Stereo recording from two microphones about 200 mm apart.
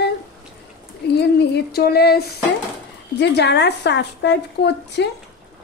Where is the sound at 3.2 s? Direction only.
60° left (ahead or behind).